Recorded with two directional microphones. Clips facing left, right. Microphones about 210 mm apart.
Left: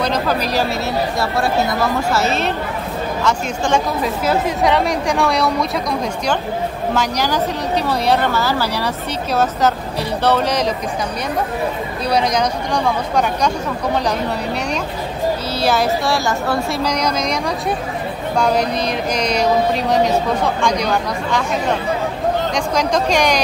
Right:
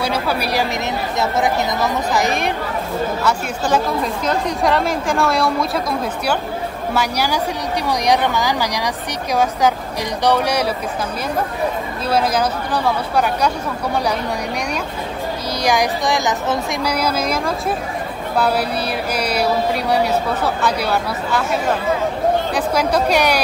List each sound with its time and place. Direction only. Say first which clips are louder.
0.0 s speech: left 2 dB; 10° right (ahead or behind)
6.9 s speech: even; 10° right (ahead or behind)
12.1 s speech: even; 5° right (ahead or behind)
15.6 s speech: left 1 dB; 15° right (ahead or behind)
16.9 s speech: even; 5° right (ahead or behind)